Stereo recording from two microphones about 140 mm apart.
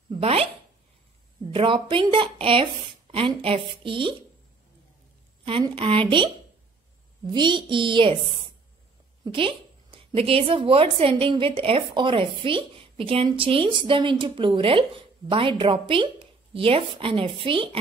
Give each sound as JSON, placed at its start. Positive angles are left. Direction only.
{"t": 0.1, "sound": "a woman's voice", "side_deg": -45}
{"t": 5.4, "sound": "a woman's voice", "side_deg": -40}
{"t": 7.3, "sound": "a woman's voice", "side_deg": -35}